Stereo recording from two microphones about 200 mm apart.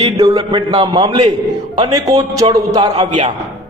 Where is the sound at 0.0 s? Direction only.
20° right (ahead or behind).